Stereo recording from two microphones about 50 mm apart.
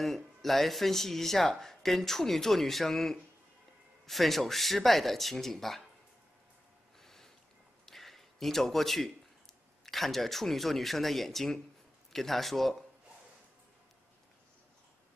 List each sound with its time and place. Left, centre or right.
0.0 s speech: centre
7.0 s a sound: centre
9.8 s speech: centre